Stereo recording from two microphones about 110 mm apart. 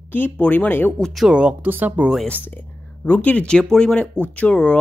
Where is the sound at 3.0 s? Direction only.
15° left (ahead or behind).